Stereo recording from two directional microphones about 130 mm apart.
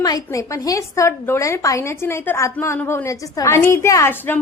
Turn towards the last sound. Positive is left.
turn(degrees=20)  # may be behind; listen again after turning